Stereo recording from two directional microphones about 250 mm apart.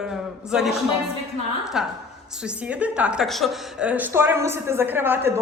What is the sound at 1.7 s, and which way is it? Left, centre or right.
A woman's voice, centre.